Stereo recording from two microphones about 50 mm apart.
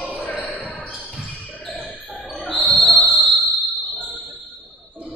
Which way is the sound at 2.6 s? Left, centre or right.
Right.